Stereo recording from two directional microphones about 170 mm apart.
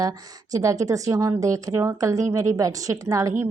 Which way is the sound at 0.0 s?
20° right (ahead or behind).